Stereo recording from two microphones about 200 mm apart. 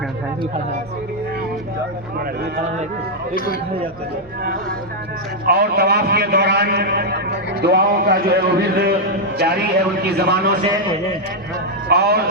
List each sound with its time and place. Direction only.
3.3 s speech: 45° left (ahead or behind)
5.5 s a man's voice: 55° right (ahead or behind)
11.9 s a man's voice: 55° right (ahead or behind)